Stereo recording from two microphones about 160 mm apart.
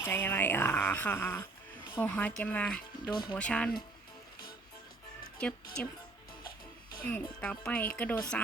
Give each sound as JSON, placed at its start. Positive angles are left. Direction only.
{"t": 0.0, "sound": "speech", "side_deg": 15}
{"t": 3.1, "sound": "speech", "side_deg": 25}
{"t": 3.3, "sound": "speech", "side_deg": 5}
{"t": 5.4, "sound": "speech", "side_deg": 5}
{"t": 7.1, "sound": "speech", "side_deg": 10}